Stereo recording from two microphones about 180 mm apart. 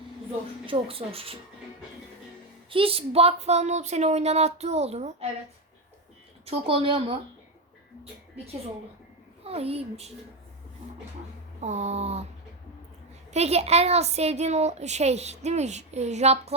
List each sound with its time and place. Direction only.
0.6 s a woman's voice: 30° right (ahead or behind)
2.6 s a woman's voice: 30° right (ahead or behind)
6.4 s a woman's voice: 30° right (ahead or behind)
9.4 s a woman's voice: 35° right (ahead or behind)
11.6 s a woman's voice: 40° right (ahead or behind)
13.3 s a woman's voice: 35° right (ahead or behind)